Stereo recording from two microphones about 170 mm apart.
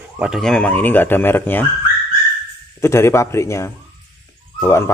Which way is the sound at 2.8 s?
15° left (ahead or behind).